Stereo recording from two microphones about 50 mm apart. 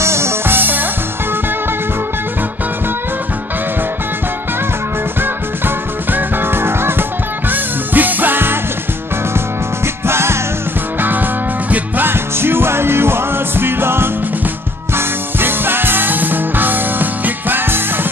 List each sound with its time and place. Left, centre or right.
0.0 s music: right
0.6 s music: right
6.1 s music: right
10.0 s music: right
11.0 s music: right